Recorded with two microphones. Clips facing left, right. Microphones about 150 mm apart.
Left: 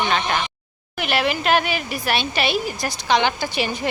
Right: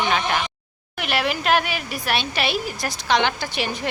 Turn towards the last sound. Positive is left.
turn(degrees=0)  # may be behind; listen again after turning